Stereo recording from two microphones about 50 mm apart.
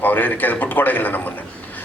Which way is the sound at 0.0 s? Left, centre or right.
Left.